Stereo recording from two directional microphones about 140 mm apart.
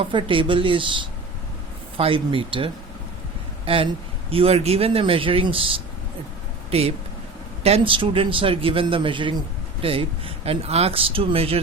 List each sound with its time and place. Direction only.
0.0 s a man's voice: 35° right (ahead or behind)
3.7 s a man's voice: 40° right (ahead or behind)